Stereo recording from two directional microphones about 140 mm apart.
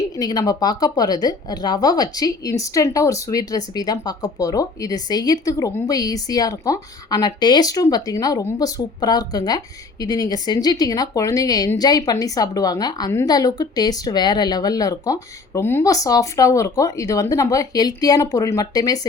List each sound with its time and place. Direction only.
0.0 s a woman's voice: 25° left (ahead or behind)